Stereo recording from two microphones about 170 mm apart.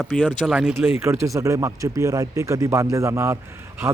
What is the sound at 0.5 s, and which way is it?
Speech, 10° right (ahead or behind).